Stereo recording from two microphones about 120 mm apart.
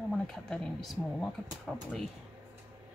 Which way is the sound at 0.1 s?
5° left (ahead or behind).